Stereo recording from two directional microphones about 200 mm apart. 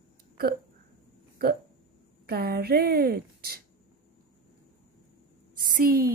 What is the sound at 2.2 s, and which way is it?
A woman's voice, 50° right (ahead or behind).